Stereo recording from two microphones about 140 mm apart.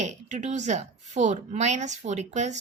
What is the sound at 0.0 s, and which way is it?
A woman's voice, 60° right (ahead or behind).